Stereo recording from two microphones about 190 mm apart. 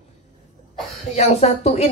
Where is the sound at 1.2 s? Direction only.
35° left (ahead or behind).